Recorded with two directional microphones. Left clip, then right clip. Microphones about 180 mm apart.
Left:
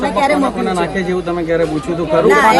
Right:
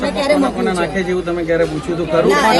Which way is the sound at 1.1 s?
60° left (ahead or behind).